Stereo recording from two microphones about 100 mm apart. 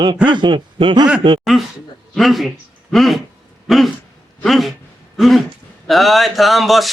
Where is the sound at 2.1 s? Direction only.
Centre (ahead or behind).